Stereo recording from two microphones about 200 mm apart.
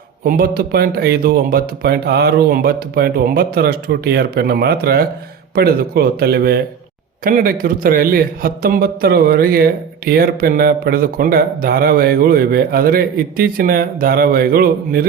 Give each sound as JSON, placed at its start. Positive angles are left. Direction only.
{"t": 0.3, "sound": "a man's voice", "side_deg": -50}